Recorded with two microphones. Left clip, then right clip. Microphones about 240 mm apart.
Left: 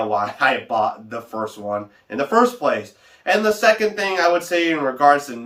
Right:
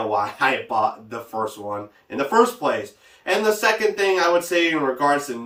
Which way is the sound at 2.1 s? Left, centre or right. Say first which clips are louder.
Left 1 dB; centre.